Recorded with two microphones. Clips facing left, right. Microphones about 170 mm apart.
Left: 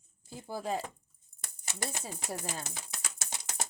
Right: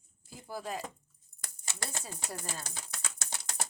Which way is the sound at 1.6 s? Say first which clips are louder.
Left 3 dB; 15° left (ahead or behind).